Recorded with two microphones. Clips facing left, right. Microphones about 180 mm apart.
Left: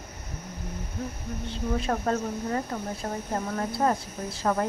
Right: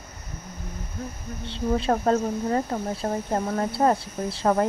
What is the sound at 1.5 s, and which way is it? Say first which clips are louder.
Speech: right 5 dB; 30° right (ahead or behind).